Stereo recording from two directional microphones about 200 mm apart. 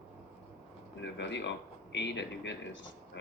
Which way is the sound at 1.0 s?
60° left (ahead or behind).